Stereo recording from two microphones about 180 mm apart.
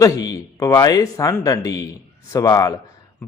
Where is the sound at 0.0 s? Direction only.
20° left (ahead or behind).